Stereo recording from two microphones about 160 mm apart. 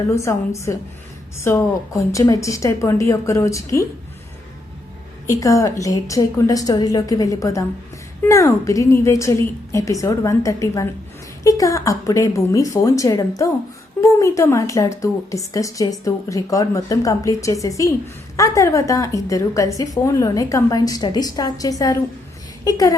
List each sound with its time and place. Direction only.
0.1 s a woman's voice: 20° left (ahead or behind)
5.2 s speech: 20° left (ahead or behind)